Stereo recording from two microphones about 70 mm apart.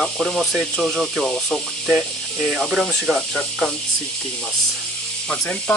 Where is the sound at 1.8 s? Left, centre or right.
Centre.